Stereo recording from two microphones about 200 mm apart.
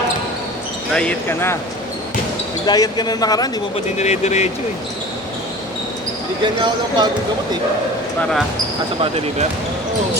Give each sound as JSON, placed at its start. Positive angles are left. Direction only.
{"t": 0.9, "sound": "speech", "side_deg": 10}
{"t": 2.6, "sound": "speech", "side_deg": 20}
{"t": 3.9, "sound": "speech", "side_deg": 35}
{"t": 6.4, "sound": "speech", "side_deg": -20}
{"t": 9.0, "sound": "speech", "side_deg": -30}